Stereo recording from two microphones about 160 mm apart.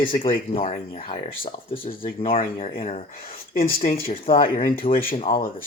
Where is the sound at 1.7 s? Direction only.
60° left (ahead or behind).